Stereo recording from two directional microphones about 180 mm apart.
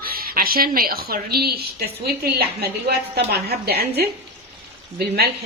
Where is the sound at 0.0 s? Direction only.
55° right (ahead or behind).